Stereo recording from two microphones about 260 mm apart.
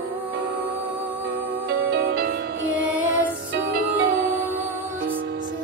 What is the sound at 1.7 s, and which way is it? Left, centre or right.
Music, right.